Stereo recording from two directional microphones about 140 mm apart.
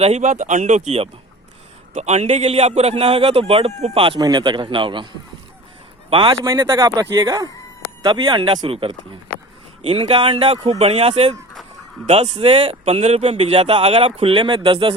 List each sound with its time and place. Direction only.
0.0 s a man's voice: 55° right (ahead or behind)
4.0 s speech: 35° right (ahead or behind)
6.1 s a man's voice: 35° right (ahead or behind)
6.3 s a man's voice: 20° right (ahead or behind); by 14.9 s 40° right (ahead or behind)